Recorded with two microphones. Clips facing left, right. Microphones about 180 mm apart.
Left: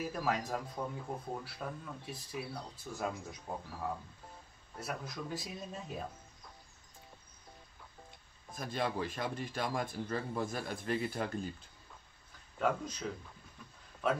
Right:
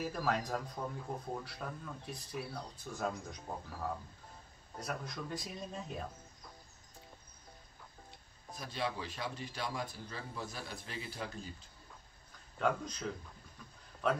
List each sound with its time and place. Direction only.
0.0 s speech: 5° left (ahead or behind)
4.7 s speech: 5° left (ahead or behind)
8.5 s a man's voice: 50° left (ahead or behind)
12.5 s a man's voice: 5° left (ahead or behind)